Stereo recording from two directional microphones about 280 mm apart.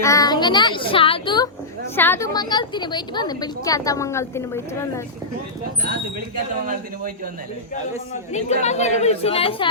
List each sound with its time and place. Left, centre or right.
0.0 s a woman's voice: centre
8.3 s a woman's voice: left